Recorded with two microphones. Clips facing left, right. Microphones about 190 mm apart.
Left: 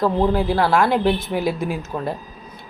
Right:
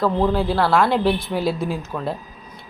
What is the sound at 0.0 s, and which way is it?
Speech, 15° left (ahead or behind).